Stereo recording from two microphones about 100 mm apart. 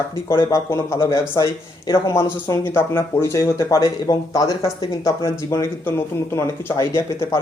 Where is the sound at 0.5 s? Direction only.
25° left (ahead or behind).